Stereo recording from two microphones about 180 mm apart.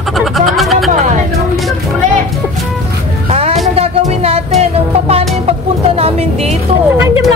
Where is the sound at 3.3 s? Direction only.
35° right (ahead or behind).